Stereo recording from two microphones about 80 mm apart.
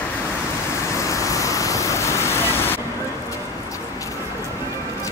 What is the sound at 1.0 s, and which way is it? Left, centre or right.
Vehicle, left.